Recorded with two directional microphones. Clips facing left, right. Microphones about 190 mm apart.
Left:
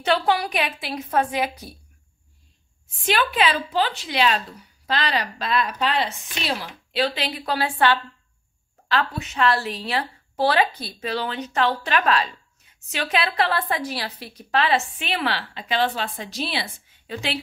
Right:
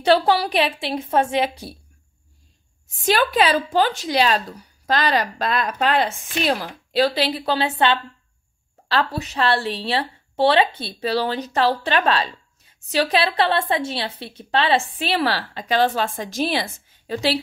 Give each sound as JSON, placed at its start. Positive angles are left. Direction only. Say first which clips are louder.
{"t": 0.0, "sound": "a woman's voice", "louder": "right 4 dB", "side_deg": -35}
{"t": 3.1, "sound": "a woman's voice", "louder": "right 4 dB", "side_deg": -40}
{"t": 8.8, "sound": "a woman's voice", "louder": "right 2 dB", "side_deg": -35}